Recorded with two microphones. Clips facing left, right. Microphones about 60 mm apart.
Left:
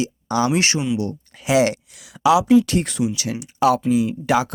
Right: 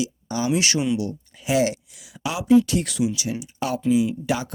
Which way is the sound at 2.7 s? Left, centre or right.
Left.